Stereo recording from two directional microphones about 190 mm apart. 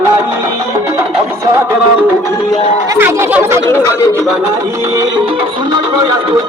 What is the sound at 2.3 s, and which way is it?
Music, 15° left (ahead or behind).